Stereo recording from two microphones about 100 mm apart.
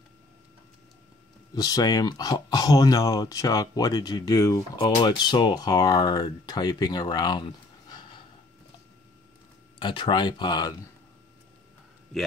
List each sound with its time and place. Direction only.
1.5 s speech: 40° left (ahead or behind)
5.0 s speech: 50° left (ahead or behind)
7.9 s gasp: 50° left (ahead or behind)
9.8 s speech: 50° left (ahead or behind)